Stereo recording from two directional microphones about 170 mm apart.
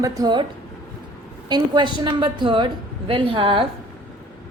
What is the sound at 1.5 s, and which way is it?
A woman's voice, 25° right (ahead or behind).